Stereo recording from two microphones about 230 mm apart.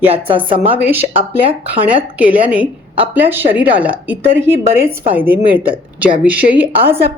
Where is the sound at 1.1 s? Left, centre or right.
Right.